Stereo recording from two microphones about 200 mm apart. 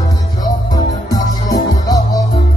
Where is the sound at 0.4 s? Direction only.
20° left (ahead or behind).